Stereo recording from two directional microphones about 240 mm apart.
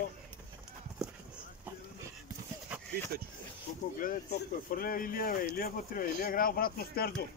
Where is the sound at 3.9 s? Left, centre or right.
Left.